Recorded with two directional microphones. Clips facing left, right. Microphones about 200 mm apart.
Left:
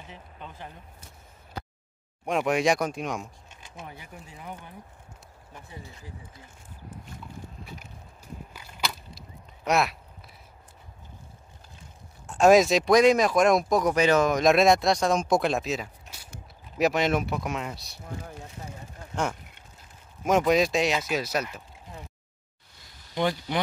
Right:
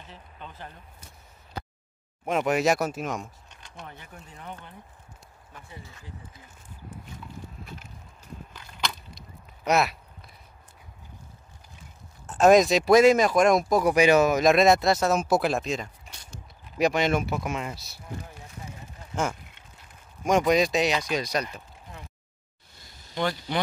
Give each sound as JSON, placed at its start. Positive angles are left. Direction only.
{"t": 0.1, "sound": "speech", "side_deg": 10}
{"t": 2.2, "sound": "speech", "side_deg": 0}
{"t": 8.5, "sound": "a sound", "side_deg": 5}
{"t": 12.3, "sound": "speech", "side_deg": 0}
{"t": 20.2, "sound": "speech", "side_deg": 0}
{"t": 23.1, "sound": "speech", "side_deg": 15}